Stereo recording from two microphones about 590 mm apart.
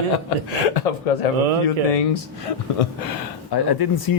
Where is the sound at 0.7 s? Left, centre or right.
Left.